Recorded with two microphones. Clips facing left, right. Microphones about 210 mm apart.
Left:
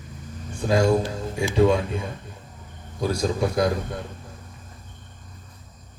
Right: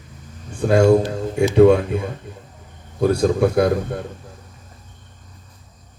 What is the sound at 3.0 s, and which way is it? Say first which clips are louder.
Speech: right 7 dB; 55° right (ahead or behind).